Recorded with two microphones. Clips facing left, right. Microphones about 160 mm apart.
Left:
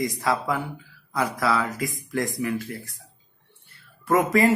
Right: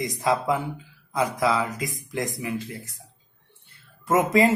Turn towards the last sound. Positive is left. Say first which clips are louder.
# even
turn(degrees=-20)  # may be behind; listen again after turning